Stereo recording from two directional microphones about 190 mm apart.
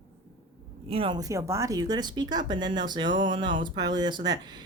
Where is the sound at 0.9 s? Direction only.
30° right (ahead or behind).